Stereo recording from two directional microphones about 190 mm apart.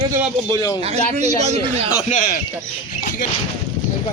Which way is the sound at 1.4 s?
35° right (ahead or behind).